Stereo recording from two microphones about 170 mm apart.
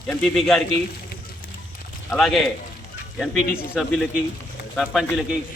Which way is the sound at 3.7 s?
Centre (ahead or behind).